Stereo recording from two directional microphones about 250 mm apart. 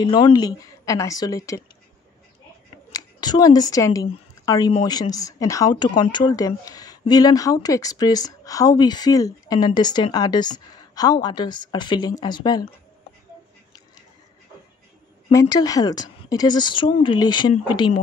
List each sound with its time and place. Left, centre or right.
0.0 s speech: centre
2.9 s speech: centre
15.3 s speech: centre